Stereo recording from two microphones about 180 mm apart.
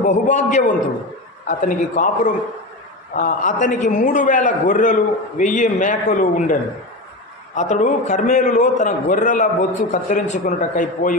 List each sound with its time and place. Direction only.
0.0 s a man's voice: 45° left (ahead or behind)